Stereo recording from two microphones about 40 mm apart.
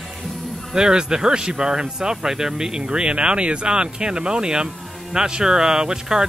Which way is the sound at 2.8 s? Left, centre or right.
Right.